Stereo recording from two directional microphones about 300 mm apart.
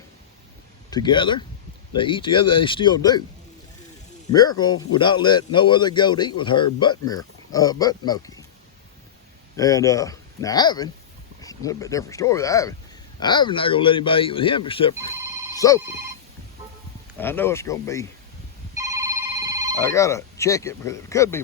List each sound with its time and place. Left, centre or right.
0.9 s a man's voice: centre
4.4 s a man's voice: centre
9.6 s a man's voice: centre
15.5 s telephone bell ringing: centre
17.2 s a man's voice: centre
18.8 s telephone bell ringing: centre
19.8 s a man's voice: centre